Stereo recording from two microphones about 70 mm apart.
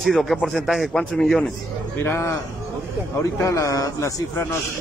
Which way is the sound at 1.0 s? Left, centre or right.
Centre.